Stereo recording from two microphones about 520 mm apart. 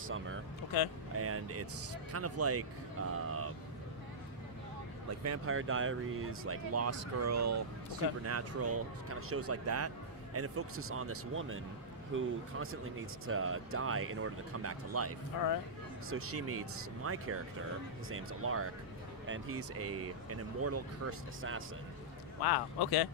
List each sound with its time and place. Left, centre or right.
1.1 s speech: right
5.2 s speech: right
22.4 s speech: left